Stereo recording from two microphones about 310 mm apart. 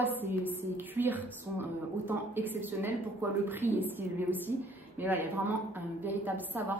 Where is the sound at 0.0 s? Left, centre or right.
Centre.